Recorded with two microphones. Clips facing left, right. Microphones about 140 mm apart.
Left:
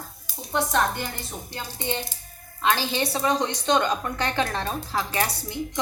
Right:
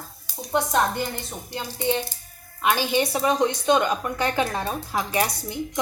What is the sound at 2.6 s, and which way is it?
Speech, 15° right (ahead or behind).